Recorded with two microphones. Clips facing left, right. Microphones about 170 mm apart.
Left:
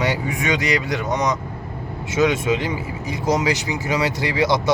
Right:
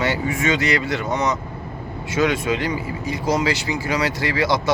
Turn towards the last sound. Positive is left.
turn(degrees=20)  # may be behind; listen again after turning